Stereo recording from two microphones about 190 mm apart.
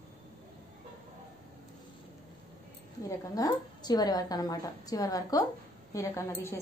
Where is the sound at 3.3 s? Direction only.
20° left (ahead or behind).